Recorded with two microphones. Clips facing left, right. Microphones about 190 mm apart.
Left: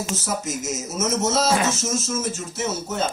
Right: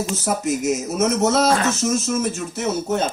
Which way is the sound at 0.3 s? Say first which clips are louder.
Right 10 dB; 60° right (ahead or behind).